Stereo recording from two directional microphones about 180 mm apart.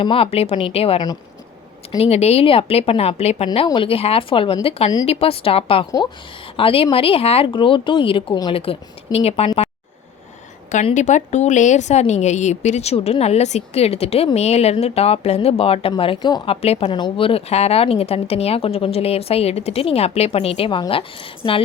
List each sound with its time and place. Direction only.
0.0 s a woman's voice: 30° left (ahead or behind)
2.0 s a woman's voice: 35° left (ahead or behind)
10.9 s a woman's voice: 40° left (ahead or behind)